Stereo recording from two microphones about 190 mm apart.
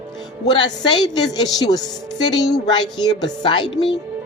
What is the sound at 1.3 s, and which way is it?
Speech, 20° left (ahead or behind).